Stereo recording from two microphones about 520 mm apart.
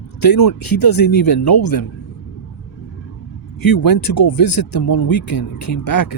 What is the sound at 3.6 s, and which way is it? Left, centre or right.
Speech, left.